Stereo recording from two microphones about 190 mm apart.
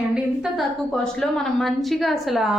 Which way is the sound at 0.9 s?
Centre (ahead or behind).